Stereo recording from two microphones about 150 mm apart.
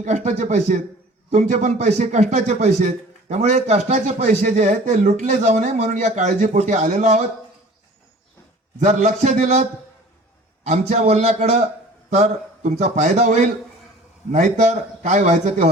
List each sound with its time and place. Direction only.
0.0 s a man's voice: 50° right (ahead or behind)
8.8 s a man's voice: 50° right (ahead or behind)